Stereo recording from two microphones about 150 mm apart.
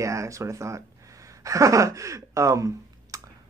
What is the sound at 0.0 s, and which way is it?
Speech, 20° right (ahead or behind).